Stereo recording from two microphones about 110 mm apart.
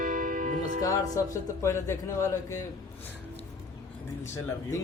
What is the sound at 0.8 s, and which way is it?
Speech, 30° left (ahead or behind).